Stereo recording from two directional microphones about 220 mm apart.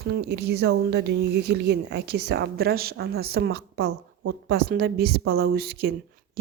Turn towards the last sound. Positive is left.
turn(degrees=-45)  # may be behind; listen again after turning